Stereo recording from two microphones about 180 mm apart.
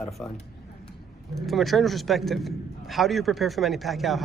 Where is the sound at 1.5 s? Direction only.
Centre (ahead or behind).